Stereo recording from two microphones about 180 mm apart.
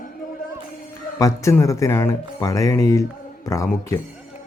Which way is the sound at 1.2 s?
15° left (ahead or behind).